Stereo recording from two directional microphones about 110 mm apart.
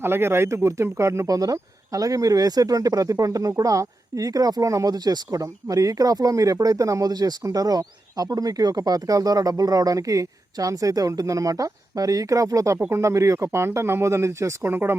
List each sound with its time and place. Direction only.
0.0 s speech: 20° right (ahead or behind)